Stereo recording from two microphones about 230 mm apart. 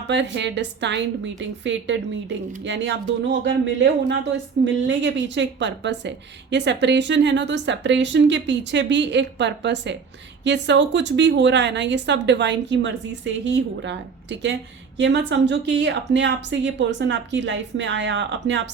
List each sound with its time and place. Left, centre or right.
0.1 s a woman's voice: right